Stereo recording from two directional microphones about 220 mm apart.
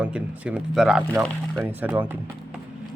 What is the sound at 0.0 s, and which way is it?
Speech, 5° right (ahead or behind).